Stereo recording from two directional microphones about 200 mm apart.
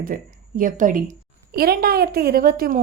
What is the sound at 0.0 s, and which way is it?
A woman's voice, 45° right (ahead or behind).